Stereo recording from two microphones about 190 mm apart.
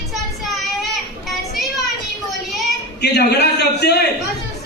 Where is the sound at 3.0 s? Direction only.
60° left (ahead or behind).